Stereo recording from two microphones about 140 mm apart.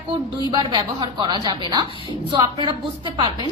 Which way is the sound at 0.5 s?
35° right (ahead or behind).